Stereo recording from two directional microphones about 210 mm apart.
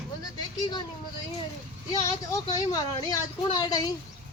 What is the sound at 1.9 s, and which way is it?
Speech, 15° left (ahead or behind).